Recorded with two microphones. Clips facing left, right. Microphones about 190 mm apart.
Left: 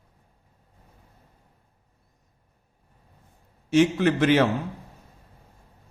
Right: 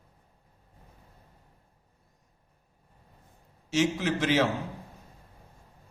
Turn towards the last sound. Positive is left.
turn(degrees=55)  # may be behind; listen again after turning